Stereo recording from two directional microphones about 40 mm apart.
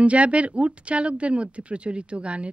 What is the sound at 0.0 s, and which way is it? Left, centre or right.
A woman's voice, right.